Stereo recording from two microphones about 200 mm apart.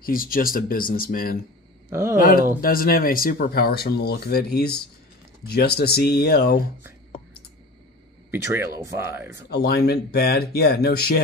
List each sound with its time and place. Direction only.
0.0 s speech: 45° left (ahead or behind)
1.9 s speech: 10° right (ahead or behind)
2.1 s speech: 45° left (ahead or behind)
8.3 s speech: 15° right (ahead or behind)
9.5 s speech: 55° left (ahead or behind)